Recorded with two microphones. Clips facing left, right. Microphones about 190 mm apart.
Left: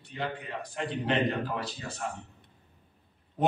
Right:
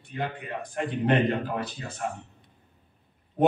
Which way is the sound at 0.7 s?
55° right (ahead or behind).